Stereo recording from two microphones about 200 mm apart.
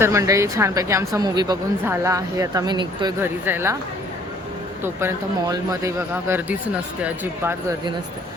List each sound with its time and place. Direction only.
0.0 s speech: 15° right (ahead or behind)
3.2 s speech: 10° right (ahead or behind)
4.8 s speech: 10° right (ahead or behind)